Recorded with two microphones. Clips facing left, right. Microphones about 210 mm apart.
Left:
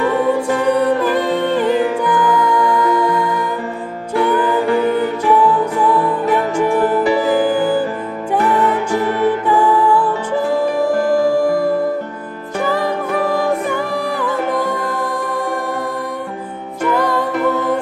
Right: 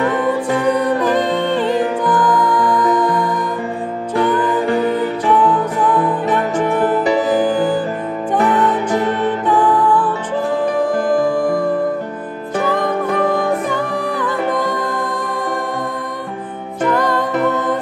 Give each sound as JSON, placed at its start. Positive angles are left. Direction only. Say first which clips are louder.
{"t": 1.3, "sound": "music", "louder": "left 1 dB", "side_deg": 5}
{"t": 7.0, "sound": "music", "louder": "even", "side_deg": -20}
{"t": 7.4, "sound": "music", "louder": "even", "side_deg": 10}
{"t": 9.5, "sound": "music", "louder": "right 2 dB", "side_deg": 10}
{"t": 11.2, "sound": "music", "louder": "left 2 dB", "side_deg": 5}
{"t": 14.2, "sound": "music", "louder": "even", "side_deg": 10}
{"t": 16.9, "sound": "music", "louder": "left 1 dB", "side_deg": 5}